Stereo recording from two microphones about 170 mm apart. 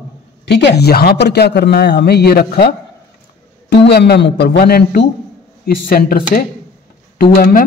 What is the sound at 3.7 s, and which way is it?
Speech, 80° left.